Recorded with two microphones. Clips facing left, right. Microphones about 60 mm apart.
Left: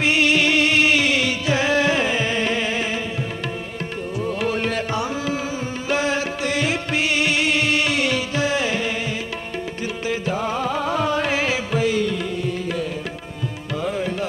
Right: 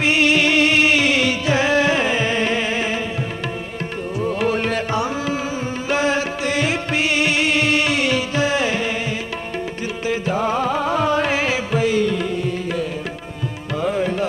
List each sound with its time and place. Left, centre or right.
0.0 s music: right
1.6 s music: right
4.2 s music: right
10.3 s music: right
10.7 s music: right
13.8 s music: right